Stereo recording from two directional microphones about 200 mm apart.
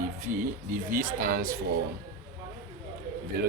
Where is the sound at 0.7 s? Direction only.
45° right (ahead or behind).